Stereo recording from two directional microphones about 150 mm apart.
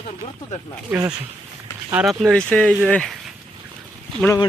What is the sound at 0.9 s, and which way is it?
Speech, 20° right (ahead or behind).